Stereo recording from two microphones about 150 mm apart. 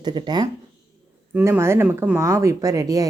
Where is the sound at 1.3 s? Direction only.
15° right (ahead or behind).